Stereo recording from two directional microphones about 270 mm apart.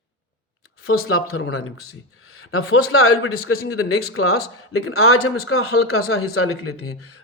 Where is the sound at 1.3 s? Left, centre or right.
Left.